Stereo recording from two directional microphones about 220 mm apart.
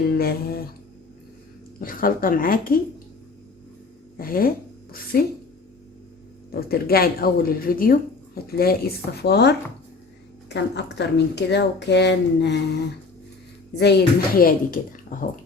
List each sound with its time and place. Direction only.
0.1 s speech: 45° left (ahead or behind)
1.8 s speech: 40° left (ahead or behind)
4.2 s speech: 40° left (ahead or behind)
6.5 s speech: 45° left (ahead or behind)
13.7 s speech: 50° left (ahead or behind)